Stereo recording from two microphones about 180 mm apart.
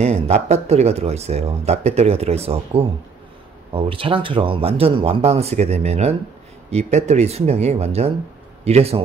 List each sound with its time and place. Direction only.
0.0 s speech: 35° right (ahead or behind)